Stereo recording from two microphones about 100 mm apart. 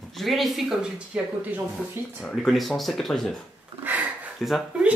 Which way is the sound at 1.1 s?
10° right (ahead or behind).